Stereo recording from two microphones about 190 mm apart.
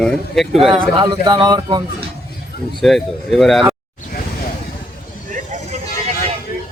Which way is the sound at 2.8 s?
Centre (ahead or behind).